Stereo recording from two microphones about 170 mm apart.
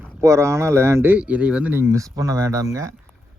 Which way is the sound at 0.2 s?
15° right (ahead or behind).